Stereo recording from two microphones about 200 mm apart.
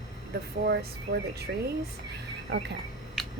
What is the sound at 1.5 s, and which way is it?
Speech, 60° right (ahead or behind).